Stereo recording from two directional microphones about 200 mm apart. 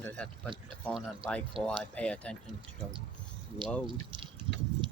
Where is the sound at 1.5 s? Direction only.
25° right (ahead or behind).